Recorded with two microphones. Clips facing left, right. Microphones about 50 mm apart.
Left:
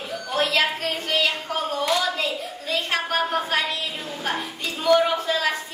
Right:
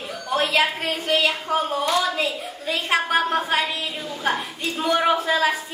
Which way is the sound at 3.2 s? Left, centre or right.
Centre.